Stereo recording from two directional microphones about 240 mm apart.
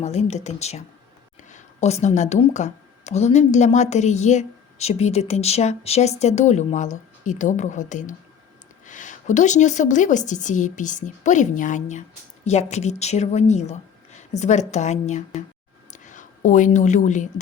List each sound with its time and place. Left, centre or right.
0.0 s a woman's voice: left